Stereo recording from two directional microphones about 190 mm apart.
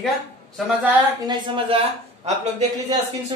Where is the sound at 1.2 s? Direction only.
25° right (ahead or behind).